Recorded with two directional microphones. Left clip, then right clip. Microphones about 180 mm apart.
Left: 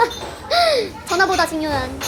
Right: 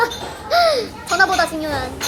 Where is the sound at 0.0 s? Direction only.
15° left (ahead or behind).